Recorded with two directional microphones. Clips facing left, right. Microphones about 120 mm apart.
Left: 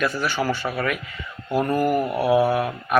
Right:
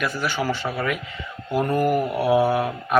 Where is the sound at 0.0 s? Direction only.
15° right (ahead or behind).